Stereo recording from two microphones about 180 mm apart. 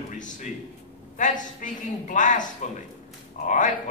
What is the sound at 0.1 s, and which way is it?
A man's voice, 45° left (ahead or behind).